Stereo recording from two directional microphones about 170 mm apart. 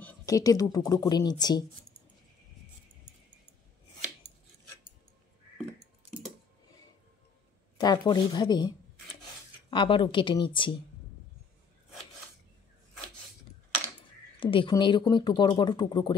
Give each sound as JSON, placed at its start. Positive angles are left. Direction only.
{"t": 0.2, "sound": "speech", "side_deg": 20}
{"t": 7.7, "sound": "speech", "side_deg": 25}
{"t": 14.4, "sound": "speech", "side_deg": 30}